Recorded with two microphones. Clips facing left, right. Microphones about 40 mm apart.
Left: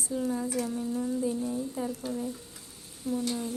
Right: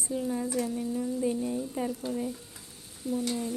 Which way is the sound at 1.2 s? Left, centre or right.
Centre.